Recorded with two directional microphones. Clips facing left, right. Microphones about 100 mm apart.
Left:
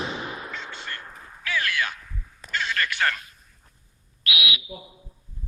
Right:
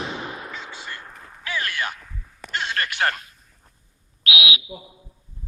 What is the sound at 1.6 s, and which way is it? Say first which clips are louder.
Heart sounds: even; 30° right (ahead or behind).